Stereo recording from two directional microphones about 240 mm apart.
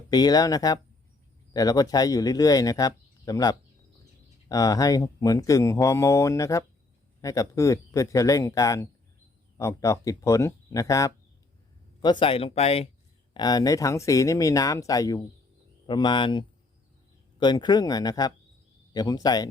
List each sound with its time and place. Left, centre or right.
0.1 s speech: centre
12.2 s speech: left
17.4 s speech: centre